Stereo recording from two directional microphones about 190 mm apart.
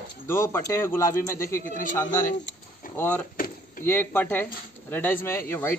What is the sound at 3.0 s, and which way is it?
Speech, 10° left (ahead or behind).